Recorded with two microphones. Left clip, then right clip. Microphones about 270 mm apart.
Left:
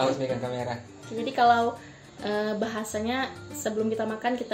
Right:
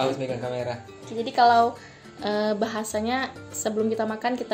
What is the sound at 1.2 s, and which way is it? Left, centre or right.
A woman's voice, right.